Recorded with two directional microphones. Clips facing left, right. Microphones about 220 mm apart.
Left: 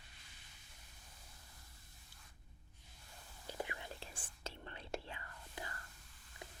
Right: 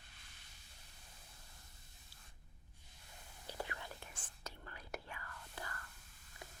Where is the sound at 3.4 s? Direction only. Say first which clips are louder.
Left 1 dB; 20° left (ahead or behind).